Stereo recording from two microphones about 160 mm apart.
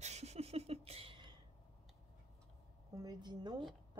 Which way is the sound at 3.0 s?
25° right (ahead or behind).